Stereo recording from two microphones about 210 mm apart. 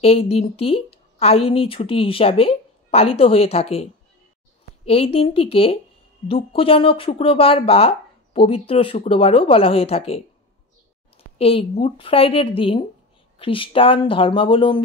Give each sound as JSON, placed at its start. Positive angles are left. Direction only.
{"t": 0.0, "sound": "speech", "side_deg": 30}
{"t": 11.3, "sound": "speech", "side_deg": 25}